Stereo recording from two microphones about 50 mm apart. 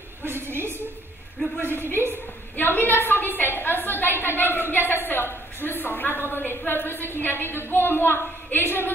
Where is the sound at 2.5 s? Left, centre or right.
Left.